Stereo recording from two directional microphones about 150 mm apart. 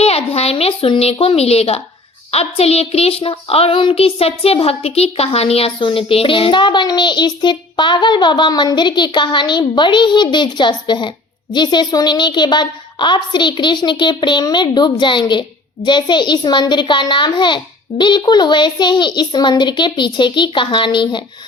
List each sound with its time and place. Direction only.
0.0 s child singing: 40° left (ahead or behind)